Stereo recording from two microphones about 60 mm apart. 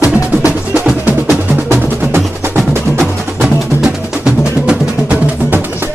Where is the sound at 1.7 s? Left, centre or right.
Right.